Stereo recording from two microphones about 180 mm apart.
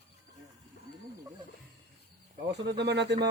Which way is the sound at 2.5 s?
70° right (ahead or behind).